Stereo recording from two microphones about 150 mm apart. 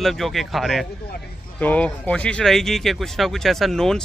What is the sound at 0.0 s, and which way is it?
Speech, centre (ahead or behind).